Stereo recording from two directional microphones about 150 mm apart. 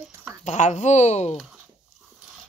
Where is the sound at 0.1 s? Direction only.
15° right (ahead or behind).